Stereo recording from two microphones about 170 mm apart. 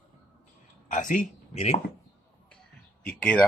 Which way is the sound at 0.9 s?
45° left (ahead or behind).